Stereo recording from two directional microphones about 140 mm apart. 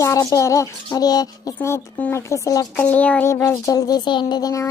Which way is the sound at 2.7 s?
10° left (ahead or behind).